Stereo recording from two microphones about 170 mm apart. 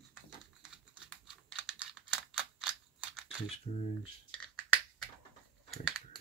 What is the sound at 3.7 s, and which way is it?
Speech, 35° left (ahead or behind).